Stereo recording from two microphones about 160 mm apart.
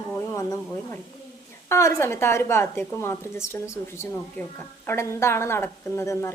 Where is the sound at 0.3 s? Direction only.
20° left (ahead or behind).